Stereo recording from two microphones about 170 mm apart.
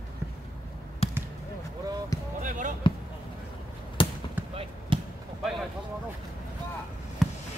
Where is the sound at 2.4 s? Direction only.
50° right (ahead or behind).